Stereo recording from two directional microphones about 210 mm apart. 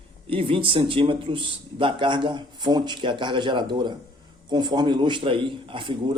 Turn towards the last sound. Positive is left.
turn(degrees=-25)  # may be behind; listen again after turning